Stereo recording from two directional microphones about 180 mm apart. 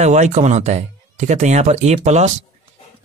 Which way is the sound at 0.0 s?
40° right (ahead or behind).